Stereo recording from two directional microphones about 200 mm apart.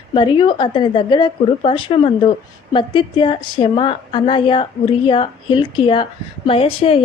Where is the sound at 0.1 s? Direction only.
25° left (ahead or behind).